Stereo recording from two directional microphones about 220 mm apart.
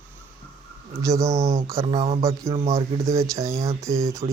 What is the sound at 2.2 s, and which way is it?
Speech, 15° right (ahead or behind).